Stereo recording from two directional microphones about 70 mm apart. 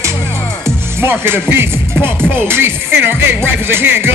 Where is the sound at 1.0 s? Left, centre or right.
Right.